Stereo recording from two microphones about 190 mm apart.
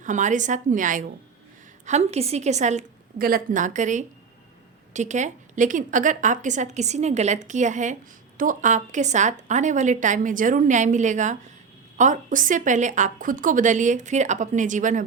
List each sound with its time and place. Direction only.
0.0 s a woman's voice: 40° right (ahead or behind)